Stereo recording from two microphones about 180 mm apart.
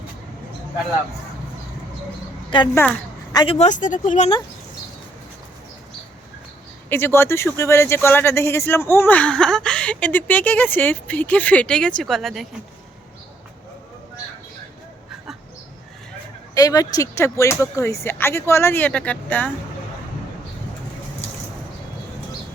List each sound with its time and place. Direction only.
2.7 s speech: 10° left (ahead or behind)
3.3 s speech: 30° left (ahead or behind)
6.9 s speech: 10° left (ahead or behind)
16.6 s speech: 20° left (ahead or behind)